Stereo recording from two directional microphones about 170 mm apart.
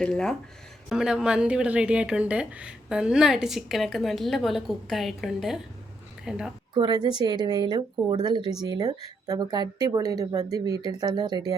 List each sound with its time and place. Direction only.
0.0 s a woman's voice: 5° left (ahead or behind)
6.7 s speech: 25° right (ahead or behind)